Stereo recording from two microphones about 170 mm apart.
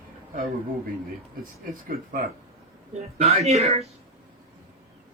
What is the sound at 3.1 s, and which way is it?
Speech, 35° right (ahead or behind).